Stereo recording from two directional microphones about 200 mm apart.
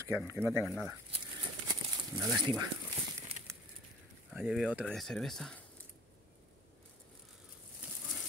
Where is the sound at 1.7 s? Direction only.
15° right (ahead or behind).